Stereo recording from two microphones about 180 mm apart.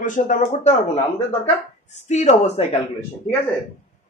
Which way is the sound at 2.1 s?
40° left (ahead or behind).